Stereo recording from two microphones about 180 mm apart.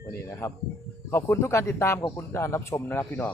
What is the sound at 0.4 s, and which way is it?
Speech, 15° left (ahead or behind).